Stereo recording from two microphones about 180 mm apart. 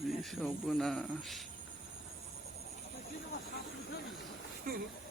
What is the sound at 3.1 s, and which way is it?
Speech, 60° left (ahead or behind).